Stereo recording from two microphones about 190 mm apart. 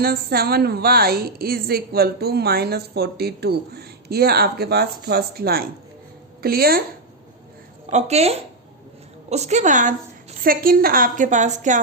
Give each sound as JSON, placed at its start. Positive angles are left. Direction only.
{"t": 0.0, "sound": "a woman's voice", "side_deg": -55}
{"t": 7.9, "sound": "a woman's voice", "side_deg": -35}